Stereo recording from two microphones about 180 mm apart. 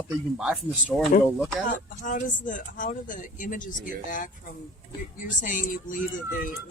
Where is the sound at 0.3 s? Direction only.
5° right (ahead or behind).